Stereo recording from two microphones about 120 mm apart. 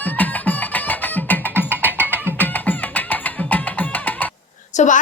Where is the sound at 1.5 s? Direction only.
15° right (ahead or behind).